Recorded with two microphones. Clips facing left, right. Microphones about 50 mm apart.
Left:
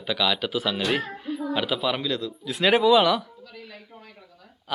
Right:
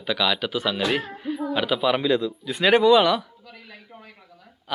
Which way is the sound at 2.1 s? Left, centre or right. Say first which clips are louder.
Right 7 dB; centre.